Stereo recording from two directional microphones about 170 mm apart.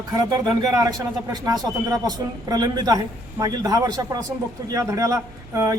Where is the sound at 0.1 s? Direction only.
20° right (ahead or behind).